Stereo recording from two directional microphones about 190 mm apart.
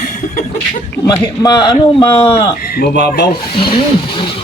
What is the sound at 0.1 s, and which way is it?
Cough, 40° left (ahead or behind).